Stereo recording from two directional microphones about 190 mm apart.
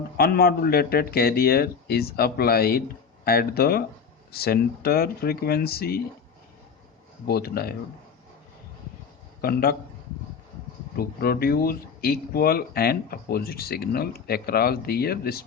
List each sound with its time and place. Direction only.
0.2 s speech: 55° left (ahead or behind)
7.3 s speech: 55° left (ahead or behind)
9.4 s speech: 55° left (ahead or behind)
10.9 s speech: 50° left (ahead or behind)